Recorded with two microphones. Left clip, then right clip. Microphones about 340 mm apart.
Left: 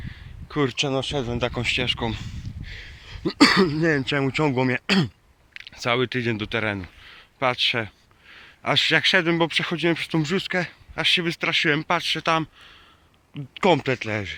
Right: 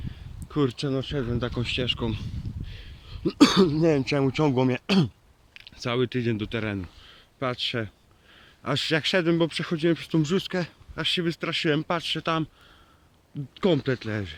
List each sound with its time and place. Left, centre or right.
0.4 s speech: centre